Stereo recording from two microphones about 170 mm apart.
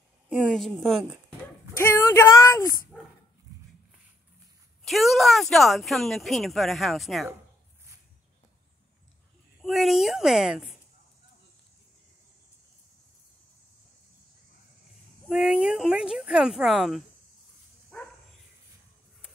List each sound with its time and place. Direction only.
0.3 s speech: centre (ahead or behind)
1.8 s speech: 15° left (ahead or behind)
4.8 s speech: centre (ahead or behind)
9.6 s speech: centre (ahead or behind)
15.2 s speech: 5° right (ahead or behind)
17.9 s dog: 5° left (ahead or behind)